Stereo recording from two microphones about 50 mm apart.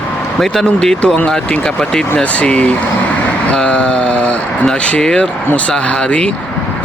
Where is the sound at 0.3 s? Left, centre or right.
Centre.